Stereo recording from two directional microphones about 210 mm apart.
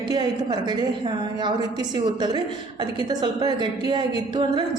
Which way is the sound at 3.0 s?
20° right (ahead or behind).